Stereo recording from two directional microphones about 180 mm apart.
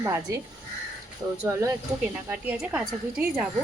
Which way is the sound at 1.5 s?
15° right (ahead or behind).